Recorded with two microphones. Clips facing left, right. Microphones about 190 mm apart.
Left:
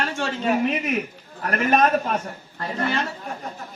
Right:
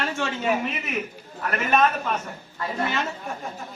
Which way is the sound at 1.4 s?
40° left (ahead or behind).